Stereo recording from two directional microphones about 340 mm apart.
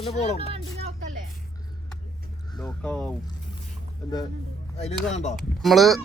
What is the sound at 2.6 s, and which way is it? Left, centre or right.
Speech, centre.